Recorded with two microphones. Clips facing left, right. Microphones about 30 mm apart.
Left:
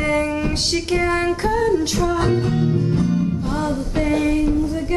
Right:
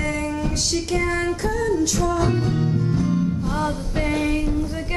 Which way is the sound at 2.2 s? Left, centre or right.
Left.